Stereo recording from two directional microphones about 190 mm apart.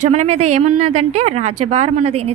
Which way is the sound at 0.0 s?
35° right (ahead or behind).